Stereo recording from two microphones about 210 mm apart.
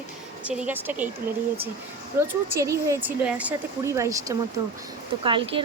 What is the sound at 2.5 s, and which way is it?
Speech, 15° right (ahead or behind).